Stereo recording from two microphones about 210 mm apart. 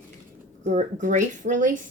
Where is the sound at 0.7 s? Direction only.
40° right (ahead or behind).